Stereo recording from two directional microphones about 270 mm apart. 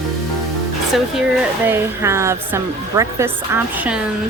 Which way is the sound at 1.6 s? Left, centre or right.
Centre.